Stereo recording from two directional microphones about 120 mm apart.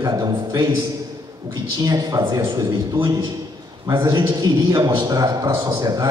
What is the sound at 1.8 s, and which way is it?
A man's voice, 30° right (ahead or behind).